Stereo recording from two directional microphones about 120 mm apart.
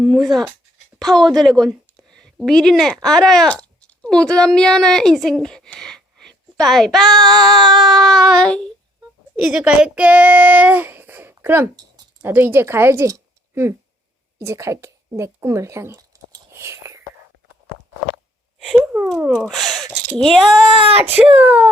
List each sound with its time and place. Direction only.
0.0 s child singing: centre (ahead or behind)
0.9 s a woman's voice: centre (ahead or behind)
7.2 s female singing: 35° right (ahead or behind)
7.7 s child singing: centre (ahead or behind)
9.5 s speech: 10° right (ahead or behind); by 16.0 s 25° right (ahead or behind)
16.5 s whispering: 25° right (ahead or behind)
18.9 s speech: 20° right (ahead or behind)
19.4 s child singing: centre (ahead or behind)
21.0 s speech: 10° right (ahead or behind)